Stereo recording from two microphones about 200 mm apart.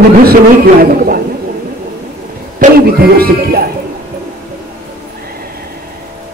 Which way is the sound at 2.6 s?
40° right (ahead or behind).